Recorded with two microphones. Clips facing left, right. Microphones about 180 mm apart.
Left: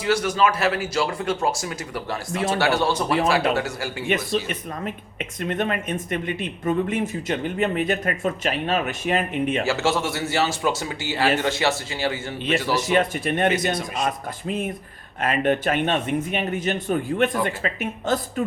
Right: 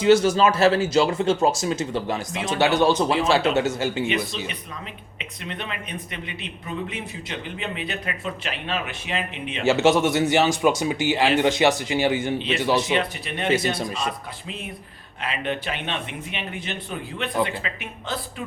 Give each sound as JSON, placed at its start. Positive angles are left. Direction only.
{"t": 0.0, "sound": "speech", "side_deg": -25}
{"t": 5.4, "sound": "speech", "side_deg": 50}
{"t": 9.6, "sound": "speech", "side_deg": -20}
{"t": 12.9, "sound": "speech", "side_deg": 50}